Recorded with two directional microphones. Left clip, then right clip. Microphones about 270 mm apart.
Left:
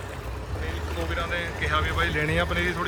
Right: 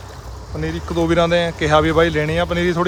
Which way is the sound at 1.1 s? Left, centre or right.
Centre.